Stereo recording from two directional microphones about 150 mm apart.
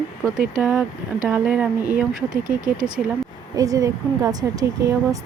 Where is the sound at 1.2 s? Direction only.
5° right (ahead or behind).